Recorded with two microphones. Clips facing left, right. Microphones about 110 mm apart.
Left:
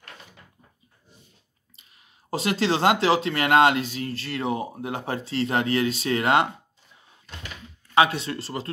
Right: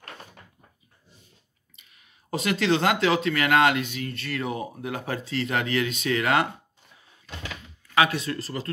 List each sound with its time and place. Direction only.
2.3 s speech: 30° left (ahead or behind)
7.9 s speech: 30° left (ahead or behind)